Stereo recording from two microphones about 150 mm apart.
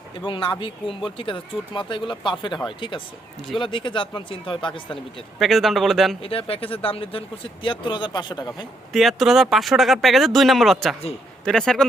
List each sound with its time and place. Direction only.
0.3 s speech: 35° left (ahead or behind)
5.4 s speech: centre (ahead or behind)
6.2 s speech: 40° left (ahead or behind)
8.9 s speech: centre (ahead or behind)